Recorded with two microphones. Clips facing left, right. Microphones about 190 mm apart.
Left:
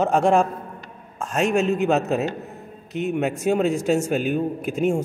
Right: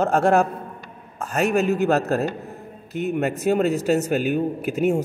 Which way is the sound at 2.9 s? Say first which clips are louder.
Even; centre (ahead or behind).